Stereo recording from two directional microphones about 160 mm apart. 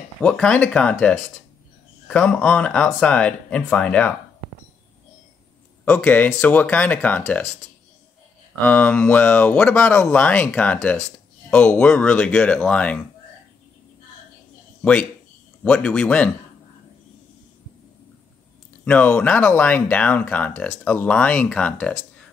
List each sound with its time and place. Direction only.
0.2 s speech: 5° left (ahead or behind)
5.9 s speech: 10° left (ahead or behind)
8.6 s speech: 10° left (ahead or behind)
14.8 s speech: 10° left (ahead or behind)
18.9 s speech: 10° left (ahead or behind)